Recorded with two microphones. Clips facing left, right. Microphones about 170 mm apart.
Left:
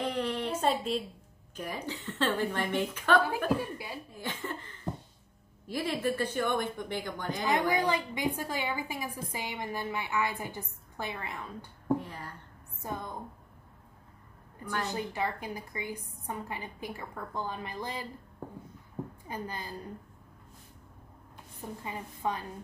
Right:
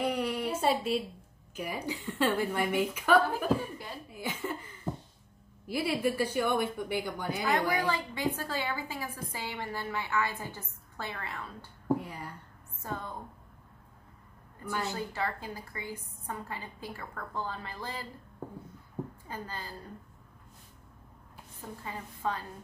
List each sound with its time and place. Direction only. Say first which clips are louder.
0.0 s a sound: right 1 dB; 10° right (ahead or behind)
1.6 s a woman's voice: right 2 dB; 10° right (ahead or behind)
3.7 s a woman's voice: left 2 dB; 10° left (ahead or behind)
4.1 s chuckle: right 4 dB; 10° right (ahead or behind)
5.7 s a woman's voice: right 1 dB; 10° right (ahead or behind)
7.4 s a woman's voice: left 2 dB; 15° left (ahead or behind)
11.9 s a woman's voice: even; 10° right (ahead or behind)
12.8 s a woman's voice: left 1 dB; 15° left (ahead or behind)
14.9 s a woman's voice: left 1 dB; 15° left (ahead or behind)
19.2 s a woman's voice: left 2 dB; 15° left (ahead or behind)
21.8 s a woman's voice: left 1 dB; 15° left (ahead or behind)